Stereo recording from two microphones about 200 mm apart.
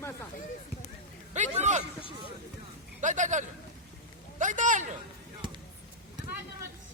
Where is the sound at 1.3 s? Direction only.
35° right (ahead or behind).